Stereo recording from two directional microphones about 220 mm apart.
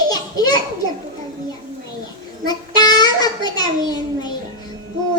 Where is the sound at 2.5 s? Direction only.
20° left (ahead or behind).